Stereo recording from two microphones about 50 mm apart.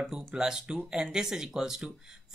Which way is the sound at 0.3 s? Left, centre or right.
Centre.